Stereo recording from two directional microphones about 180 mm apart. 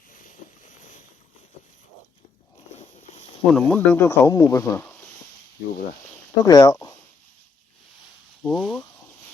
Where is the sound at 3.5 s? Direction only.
10° left (ahead or behind).